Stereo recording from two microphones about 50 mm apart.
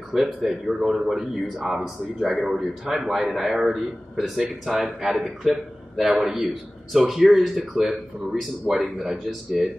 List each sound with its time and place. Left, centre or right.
0.1 s a man's voice: centre